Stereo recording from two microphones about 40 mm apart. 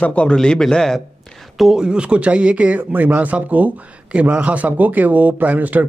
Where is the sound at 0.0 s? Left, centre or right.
Left.